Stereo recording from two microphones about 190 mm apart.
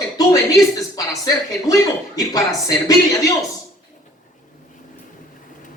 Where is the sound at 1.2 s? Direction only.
20° left (ahead or behind).